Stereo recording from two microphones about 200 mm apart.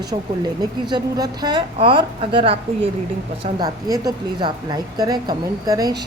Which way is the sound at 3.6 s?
20° right (ahead or behind).